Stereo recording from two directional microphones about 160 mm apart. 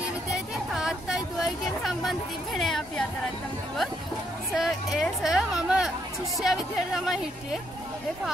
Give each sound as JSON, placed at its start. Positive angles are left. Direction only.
{"t": 0.3, "sound": "a sound", "side_deg": -5}
{"t": 4.6, "sound": "hubbub", "side_deg": 0}
{"t": 6.4, "sound": "speech", "side_deg": 0}